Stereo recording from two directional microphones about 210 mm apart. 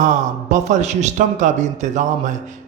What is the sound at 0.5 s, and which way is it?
A man's voice, 35° right (ahead or behind).